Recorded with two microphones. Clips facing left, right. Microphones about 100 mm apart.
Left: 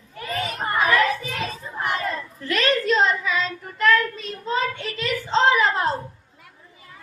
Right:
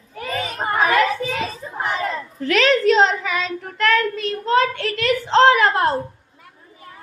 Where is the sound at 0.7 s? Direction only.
70° right (ahead or behind).